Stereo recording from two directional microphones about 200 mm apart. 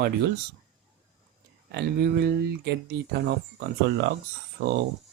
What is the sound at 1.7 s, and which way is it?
Speech, 55° right (ahead or behind).